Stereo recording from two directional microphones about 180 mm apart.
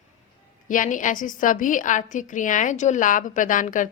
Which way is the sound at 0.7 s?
45° left (ahead or behind).